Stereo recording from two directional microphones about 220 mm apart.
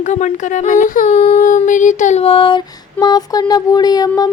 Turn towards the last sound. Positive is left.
turn(degrees=15)  # may be behind; listen again after turning